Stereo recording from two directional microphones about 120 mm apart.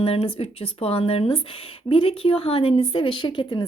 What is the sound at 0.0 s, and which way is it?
Speech, 55° left (ahead or behind).